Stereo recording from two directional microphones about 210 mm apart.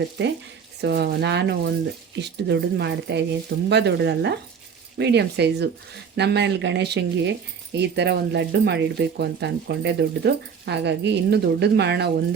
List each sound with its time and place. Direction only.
0.2 s speech: 55° right (ahead or behind)